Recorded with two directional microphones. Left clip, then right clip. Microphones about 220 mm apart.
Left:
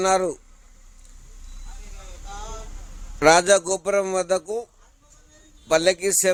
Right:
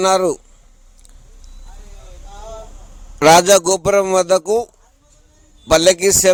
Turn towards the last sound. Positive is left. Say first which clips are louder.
# right 8 dB
turn(degrees=-40)  # may be behind; listen again after turning